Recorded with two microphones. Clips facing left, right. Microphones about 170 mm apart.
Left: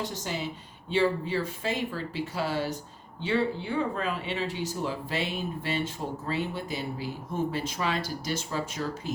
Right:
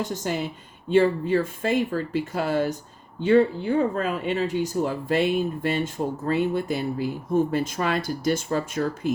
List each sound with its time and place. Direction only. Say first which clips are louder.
0.0 s speech: right 6 dB; 50° right (ahead or behind)